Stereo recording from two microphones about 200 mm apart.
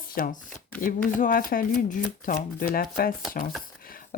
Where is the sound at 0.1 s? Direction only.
45° left (ahead or behind).